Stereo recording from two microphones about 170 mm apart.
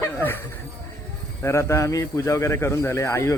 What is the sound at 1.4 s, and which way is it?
A man's voice, 15° left (ahead or behind).